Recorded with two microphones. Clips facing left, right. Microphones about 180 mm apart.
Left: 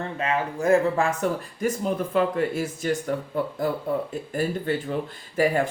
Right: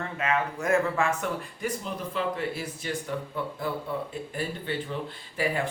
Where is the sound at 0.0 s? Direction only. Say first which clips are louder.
Left 2 dB; 30° left (ahead or behind).